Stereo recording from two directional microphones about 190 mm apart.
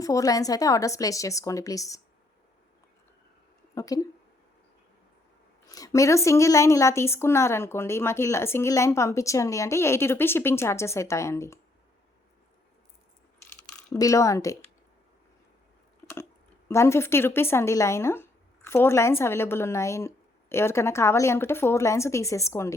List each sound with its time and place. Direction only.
0.0 s speech: 15° left (ahead or behind)
3.8 s speech: 20° left (ahead or behind)
5.6 s speech: 20° left (ahead or behind)
13.9 s speech: 15° left (ahead or behind)
16.6 s speech: 15° left (ahead or behind)